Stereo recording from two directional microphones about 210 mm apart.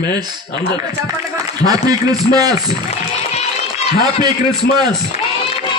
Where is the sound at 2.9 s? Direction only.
30° left (ahead or behind).